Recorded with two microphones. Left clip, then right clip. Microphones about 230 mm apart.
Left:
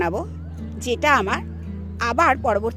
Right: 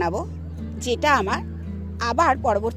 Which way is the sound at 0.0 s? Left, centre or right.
Centre.